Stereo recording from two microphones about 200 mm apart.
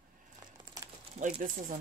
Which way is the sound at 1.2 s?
45° right (ahead or behind).